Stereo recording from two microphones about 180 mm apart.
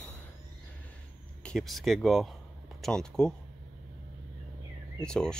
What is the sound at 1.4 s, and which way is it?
Speech, centre (ahead or behind).